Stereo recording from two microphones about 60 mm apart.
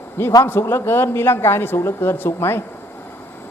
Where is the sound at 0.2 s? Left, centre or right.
Left.